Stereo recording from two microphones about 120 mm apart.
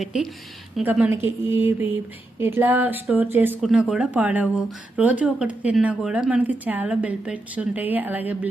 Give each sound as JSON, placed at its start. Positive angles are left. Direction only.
{"t": 0.0, "sound": "a woman's voice", "side_deg": 0}
{"t": 1.1, "sound": "mantra", "side_deg": -20}
{"t": 2.4, "sound": "a woman's voice", "side_deg": -20}
{"t": 3.6, "sound": "a woman's voice", "side_deg": 0}